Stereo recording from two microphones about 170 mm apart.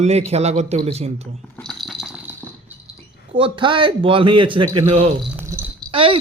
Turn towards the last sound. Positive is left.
turn(degrees=-30)  # may be behind; listen again after turning